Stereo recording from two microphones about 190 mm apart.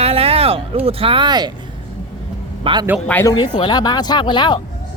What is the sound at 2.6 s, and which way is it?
Speech, 25° right (ahead or behind).